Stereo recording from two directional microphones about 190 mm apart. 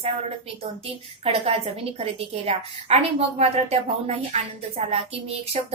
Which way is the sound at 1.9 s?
35° right (ahead or behind).